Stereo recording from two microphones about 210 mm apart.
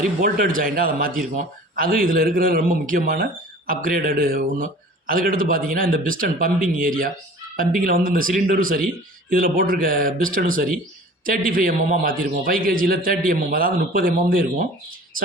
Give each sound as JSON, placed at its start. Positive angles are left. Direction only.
{"t": 0.2, "sound": "a man's voice", "side_deg": -40}